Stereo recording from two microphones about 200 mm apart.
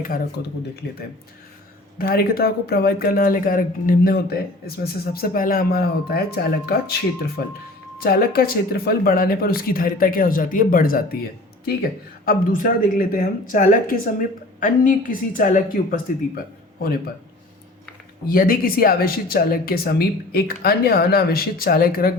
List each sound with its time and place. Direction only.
2.0 s speech: 50° left (ahead or behind)
18.3 s speech: 45° left (ahead or behind)